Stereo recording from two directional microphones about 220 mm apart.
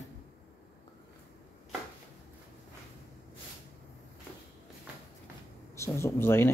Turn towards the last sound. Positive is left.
turn(degrees=10)  # may be behind; listen again after turning